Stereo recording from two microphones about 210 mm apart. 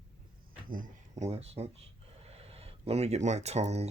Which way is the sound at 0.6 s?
40° right (ahead or behind).